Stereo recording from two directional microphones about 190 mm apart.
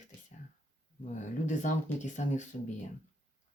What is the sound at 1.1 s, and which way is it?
Speech, 40° left (ahead or behind).